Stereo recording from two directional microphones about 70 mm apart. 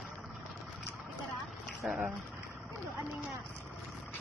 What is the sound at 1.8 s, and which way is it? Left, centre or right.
Speech, centre.